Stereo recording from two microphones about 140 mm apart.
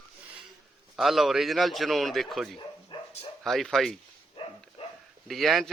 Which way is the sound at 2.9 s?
35° left (ahead or behind).